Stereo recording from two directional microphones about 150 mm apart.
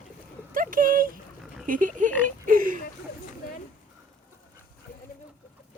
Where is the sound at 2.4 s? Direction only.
70° right (ahead or behind).